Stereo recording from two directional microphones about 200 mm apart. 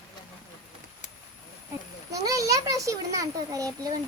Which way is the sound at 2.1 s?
15° right (ahead or behind).